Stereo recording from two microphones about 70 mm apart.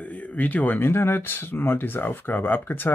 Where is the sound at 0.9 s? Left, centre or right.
Left.